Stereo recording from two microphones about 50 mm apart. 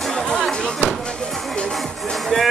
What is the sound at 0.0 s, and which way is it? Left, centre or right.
Music, centre.